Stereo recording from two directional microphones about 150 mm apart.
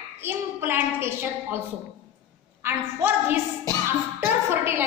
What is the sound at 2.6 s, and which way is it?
Speech, 15° right (ahead or behind).